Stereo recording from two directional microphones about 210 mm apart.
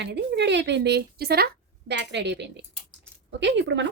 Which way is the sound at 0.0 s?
55° right (ahead or behind).